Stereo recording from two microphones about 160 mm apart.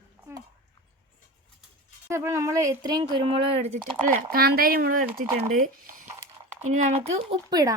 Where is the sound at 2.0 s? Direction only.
15° right (ahead or behind).